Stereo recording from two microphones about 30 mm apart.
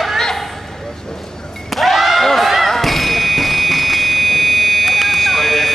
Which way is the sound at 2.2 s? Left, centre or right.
Centre.